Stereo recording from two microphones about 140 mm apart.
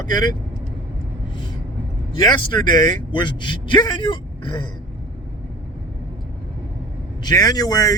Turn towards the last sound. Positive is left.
turn(degrees=25)  # may be behind; listen again after turning